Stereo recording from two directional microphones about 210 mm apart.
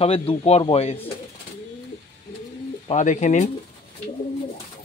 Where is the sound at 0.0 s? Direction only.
30° left (ahead or behind).